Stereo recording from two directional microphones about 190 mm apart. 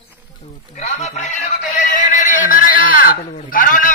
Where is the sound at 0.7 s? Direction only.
35° left (ahead or behind).